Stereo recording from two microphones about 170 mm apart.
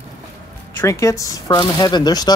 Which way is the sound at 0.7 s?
15° left (ahead or behind).